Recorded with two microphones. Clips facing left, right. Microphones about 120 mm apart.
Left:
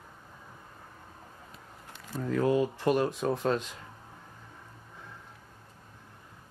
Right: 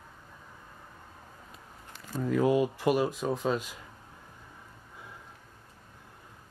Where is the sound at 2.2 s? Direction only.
10° right (ahead or behind).